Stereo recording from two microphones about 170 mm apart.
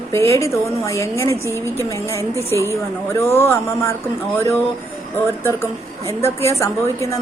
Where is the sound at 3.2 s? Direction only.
15° left (ahead or behind).